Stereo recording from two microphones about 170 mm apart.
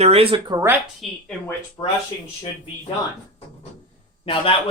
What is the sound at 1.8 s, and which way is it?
Speech, 30° left (ahead or behind).